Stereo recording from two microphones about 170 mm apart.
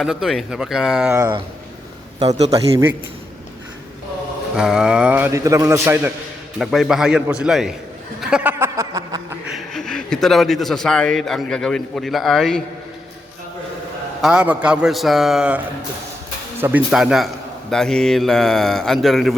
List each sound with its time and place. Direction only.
0.0 s speech: centre (ahead or behind)
2.1 s a man's voice: 40° right (ahead or behind)
2.5 s a man's voice: 20° right (ahead or behind)
4.5 s a man's voice: 5° right (ahead or behind)
6.6 s speech: centre (ahead or behind)
8.2 s a sound: 5° right (ahead or behind)
9.5 s speech: centre (ahead or behind)
14.2 s speech: 5° right (ahead or behind)
16.9 s speech: centre (ahead or behind)